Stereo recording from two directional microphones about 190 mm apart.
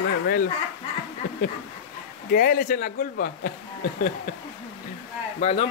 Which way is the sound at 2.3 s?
50° left (ahead or behind).